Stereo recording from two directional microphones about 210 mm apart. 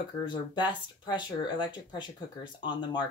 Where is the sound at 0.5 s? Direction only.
20° left (ahead or behind).